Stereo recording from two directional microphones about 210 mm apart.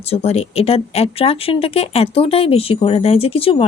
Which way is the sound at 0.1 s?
30° left (ahead or behind).